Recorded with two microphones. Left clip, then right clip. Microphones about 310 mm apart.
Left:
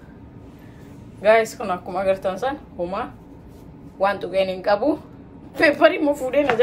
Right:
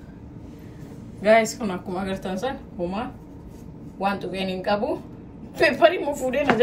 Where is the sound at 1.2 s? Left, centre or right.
Centre.